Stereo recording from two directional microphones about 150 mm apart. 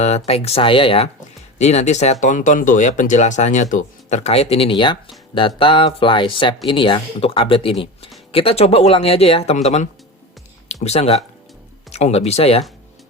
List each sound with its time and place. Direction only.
0.3 s speech: 40° left (ahead or behind)